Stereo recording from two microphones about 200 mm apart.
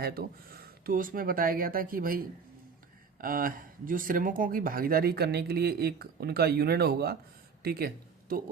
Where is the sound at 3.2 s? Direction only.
45° right (ahead or behind).